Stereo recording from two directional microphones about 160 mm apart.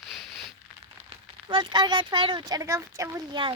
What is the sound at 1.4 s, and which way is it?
A child's voice, 30° right (ahead or behind).